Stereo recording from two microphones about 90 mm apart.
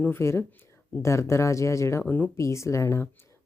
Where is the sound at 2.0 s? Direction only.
20° left (ahead or behind).